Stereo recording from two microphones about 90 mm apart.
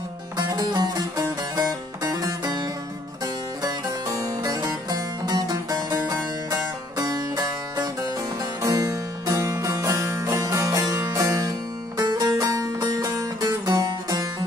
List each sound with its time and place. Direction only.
0.4 s music: 45° right (ahead or behind)
3.6 s music: 40° right (ahead or behind)